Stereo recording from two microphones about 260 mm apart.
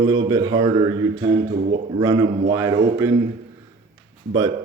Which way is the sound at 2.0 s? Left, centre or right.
Centre.